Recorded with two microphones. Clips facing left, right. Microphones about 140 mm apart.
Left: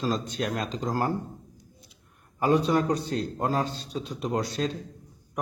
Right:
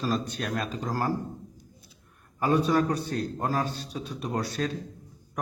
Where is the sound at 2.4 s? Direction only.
20° left (ahead or behind).